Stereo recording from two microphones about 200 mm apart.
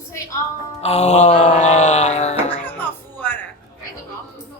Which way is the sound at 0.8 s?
30° left (ahead or behind).